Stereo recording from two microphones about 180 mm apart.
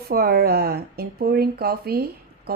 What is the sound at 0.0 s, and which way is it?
Speech, 55° right (ahead or behind).